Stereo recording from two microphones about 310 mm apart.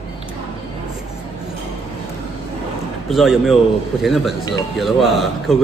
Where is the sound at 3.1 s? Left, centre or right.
Centre.